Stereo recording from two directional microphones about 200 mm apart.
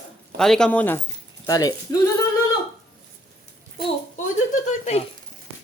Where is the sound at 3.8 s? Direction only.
35° left (ahead or behind).